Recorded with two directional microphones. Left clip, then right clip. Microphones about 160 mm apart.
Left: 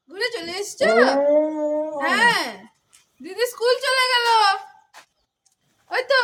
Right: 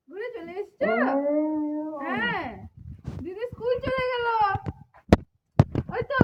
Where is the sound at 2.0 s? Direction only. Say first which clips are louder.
Left 11 dB; 35° left (ahead or behind).